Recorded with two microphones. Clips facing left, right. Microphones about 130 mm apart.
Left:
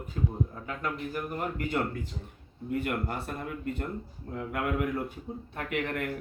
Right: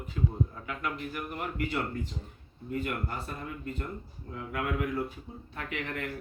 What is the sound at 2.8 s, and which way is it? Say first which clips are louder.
Speech: left 3 dB; 60° left (ahead or behind).